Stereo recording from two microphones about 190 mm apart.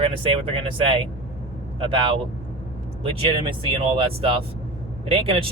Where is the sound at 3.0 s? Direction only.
25° right (ahead or behind).